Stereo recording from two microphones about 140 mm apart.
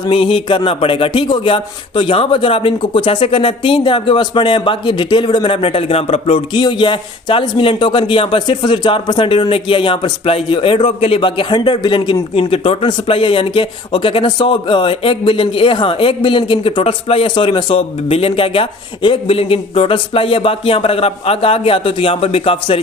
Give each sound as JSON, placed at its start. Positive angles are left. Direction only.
{"t": 0.0, "sound": "speech", "side_deg": 40}